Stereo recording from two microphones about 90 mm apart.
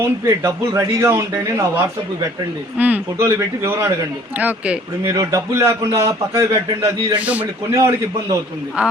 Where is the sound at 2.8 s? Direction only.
15° right (ahead or behind).